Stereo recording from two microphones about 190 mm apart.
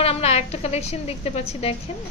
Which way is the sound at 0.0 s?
30° left (ahead or behind).